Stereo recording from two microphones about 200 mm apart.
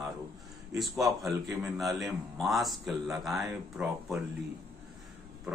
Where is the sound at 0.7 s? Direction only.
Centre (ahead or behind).